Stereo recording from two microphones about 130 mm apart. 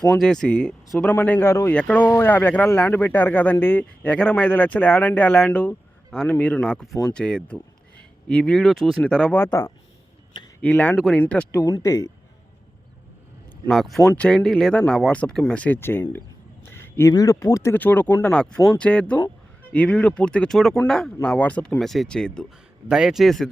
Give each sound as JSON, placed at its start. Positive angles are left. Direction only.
{"t": 0.2, "sound": "speech", "side_deg": 5}
{"t": 9.4, "sound": "speech", "side_deg": 25}
{"t": 10.6, "sound": "speech", "side_deg": 10}
{"t": 11.6, "sound": "speech", "side_deg": 25}
{"t": 13.7, "sound": "speech", "side_deg": 0}
{"t": 16.6, "sound": "a sound", "side_deg": 15}
{"t": 17.1, "sound": "speech", "side_deg": 25}
{"t": 22.9, "sound": "speech", "side_deg": -5}